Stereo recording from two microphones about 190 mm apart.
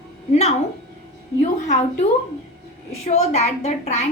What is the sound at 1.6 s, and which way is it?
A woman's voice, 40° left (ahead or behind).